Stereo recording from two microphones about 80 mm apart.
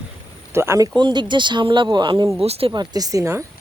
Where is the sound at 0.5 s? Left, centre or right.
Right.